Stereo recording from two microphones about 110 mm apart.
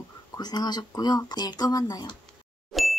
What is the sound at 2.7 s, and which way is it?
Music, centre (ahead or behind).